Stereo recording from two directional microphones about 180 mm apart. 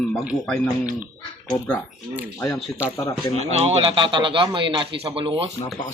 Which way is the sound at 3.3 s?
35° right (ahead or behind).